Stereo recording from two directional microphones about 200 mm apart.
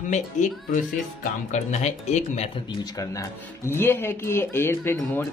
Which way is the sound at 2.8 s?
15° left (ahead or behind).